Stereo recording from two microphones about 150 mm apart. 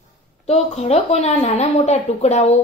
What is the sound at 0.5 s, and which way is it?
Speech, 45° left (ahead or behind).